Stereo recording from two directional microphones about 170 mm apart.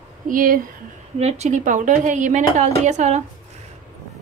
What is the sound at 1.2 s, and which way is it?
Speech, 40° right (ahead or behind).